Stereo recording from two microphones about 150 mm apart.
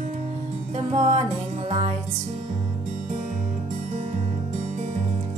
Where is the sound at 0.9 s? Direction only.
45° right (ahead or behind).